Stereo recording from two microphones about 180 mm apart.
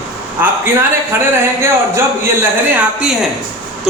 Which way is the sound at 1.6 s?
15° right (ahead or behind).